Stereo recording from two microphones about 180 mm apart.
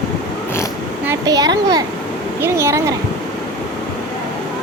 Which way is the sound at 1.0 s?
20° right (ahead or behind).